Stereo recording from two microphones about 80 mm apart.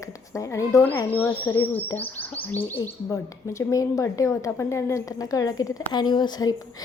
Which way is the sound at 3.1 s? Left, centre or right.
Left.